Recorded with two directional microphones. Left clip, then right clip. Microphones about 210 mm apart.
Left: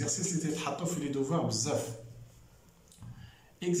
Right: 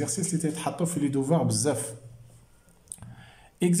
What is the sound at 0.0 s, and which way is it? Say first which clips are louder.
Speech: right 4 dB; 35° right (ahead or behind).